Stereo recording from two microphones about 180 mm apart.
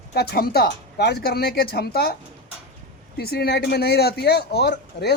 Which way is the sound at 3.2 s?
60° left (ahead or behind).